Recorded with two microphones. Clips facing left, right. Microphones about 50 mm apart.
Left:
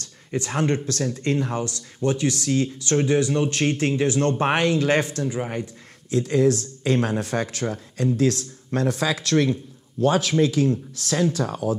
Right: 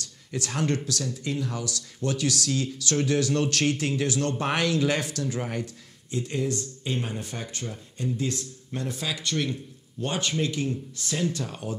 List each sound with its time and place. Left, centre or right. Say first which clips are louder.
0.0 s a sound: left 5 dB; left
0.8 s speech: left 6 dB; left
1.5 s speech: left 6 dB; left
3.7 s speech: left 5 dB; left
5.4 s speech: left 3 dB; centre
6.1 s speech: left 9 dB; left